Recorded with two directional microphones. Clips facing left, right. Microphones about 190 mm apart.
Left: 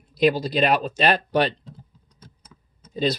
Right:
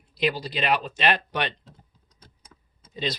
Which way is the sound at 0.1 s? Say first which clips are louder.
Left 7 dB; 40° left (ahead or behind).